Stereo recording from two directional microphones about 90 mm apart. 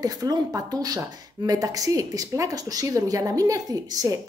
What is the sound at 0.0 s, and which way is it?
Speech, 45° right (ahead or behind).